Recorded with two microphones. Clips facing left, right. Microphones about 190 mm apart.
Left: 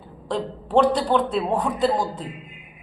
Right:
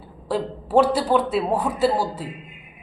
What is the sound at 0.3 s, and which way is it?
A woman's voice, 5° right (ahead or behind).